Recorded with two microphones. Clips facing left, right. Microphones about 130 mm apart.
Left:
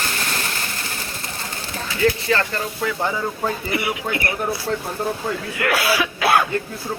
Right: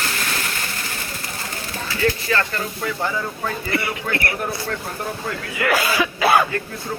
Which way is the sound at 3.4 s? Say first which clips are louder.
Left 1 dB; 10° left (ahead or behind).